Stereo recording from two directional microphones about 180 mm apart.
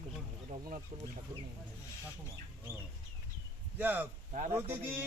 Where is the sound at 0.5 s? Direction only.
40° right (ahead or behind).